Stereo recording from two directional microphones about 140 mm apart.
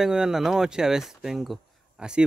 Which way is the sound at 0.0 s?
5° right (ahead or behind).